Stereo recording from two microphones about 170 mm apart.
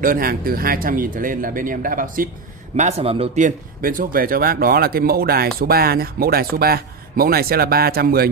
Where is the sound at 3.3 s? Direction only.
50° right (ahead or behind).